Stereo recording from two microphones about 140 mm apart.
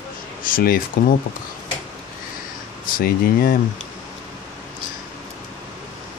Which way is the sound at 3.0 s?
90° left.